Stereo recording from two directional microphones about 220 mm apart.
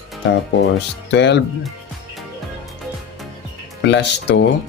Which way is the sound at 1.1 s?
50° left (ahead or behind).